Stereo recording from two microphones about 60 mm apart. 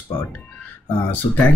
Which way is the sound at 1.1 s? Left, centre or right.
Left.